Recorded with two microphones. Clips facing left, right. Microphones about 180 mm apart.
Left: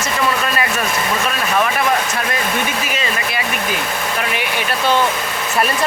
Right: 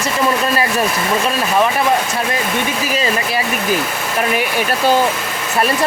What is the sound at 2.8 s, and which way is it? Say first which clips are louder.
Speech: right 4 dB; 35° right (ahead or behind).